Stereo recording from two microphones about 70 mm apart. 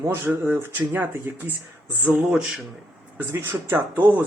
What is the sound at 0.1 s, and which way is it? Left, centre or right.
Speech, right.